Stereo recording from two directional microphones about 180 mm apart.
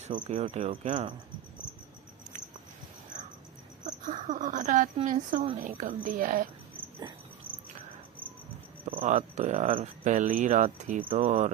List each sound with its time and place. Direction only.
0.0 s speech: 35° right (ahead or behind)
3.8 s a sound: 40° right (ahead or behind)
5.3 s speech: 50° right (ahead or behind)
9.0 s speech: 40° right (ahead or behind)